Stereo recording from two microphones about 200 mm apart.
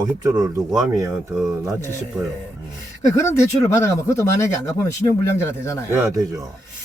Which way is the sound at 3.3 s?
15° left (ahead or behind).